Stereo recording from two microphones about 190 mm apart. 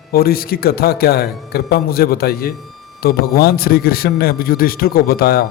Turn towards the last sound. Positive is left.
turn(degrees=55)  # may be behind; listen again after turning